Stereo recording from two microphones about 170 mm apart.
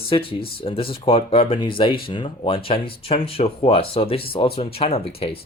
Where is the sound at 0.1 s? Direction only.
35° left (ahead or behind).